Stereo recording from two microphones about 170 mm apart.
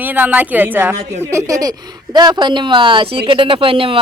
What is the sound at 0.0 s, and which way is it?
A woman's voice, 10° right (ahead or behind).